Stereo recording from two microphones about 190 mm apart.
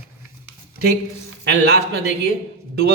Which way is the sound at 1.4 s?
60° right (ahead or behind).